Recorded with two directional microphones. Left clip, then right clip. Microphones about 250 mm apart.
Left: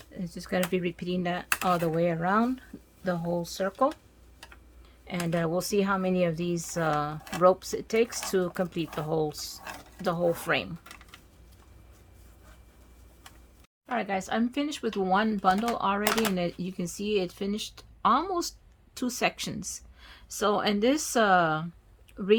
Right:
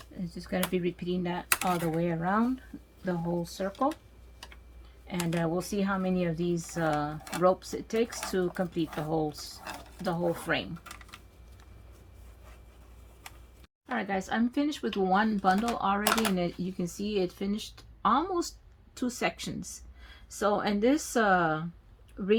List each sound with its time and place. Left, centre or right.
0.2 s speech: left
5.0 s speech: left
13.9 s speech: left